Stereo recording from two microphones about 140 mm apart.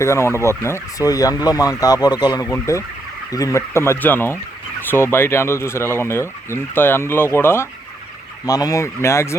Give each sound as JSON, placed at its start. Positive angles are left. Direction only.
{"t": 0.0, "sound": "speech", "side_deg": 20}